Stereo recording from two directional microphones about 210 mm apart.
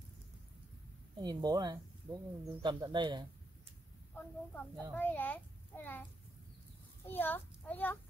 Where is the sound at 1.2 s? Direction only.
20° right (ahead or behind).